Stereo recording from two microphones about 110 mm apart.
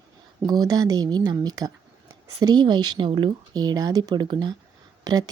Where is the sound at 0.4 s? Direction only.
40° right (ahead or behind).